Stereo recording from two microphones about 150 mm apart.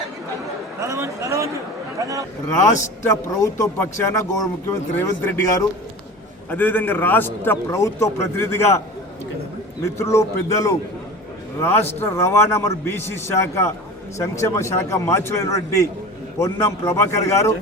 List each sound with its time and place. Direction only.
0.8 s a man's voice: 20° right (ahead or behind)
3.0 s a man's voice: 20° left (ahead or behind)
9.8 s a man's voice: 20° left (ahead or behind)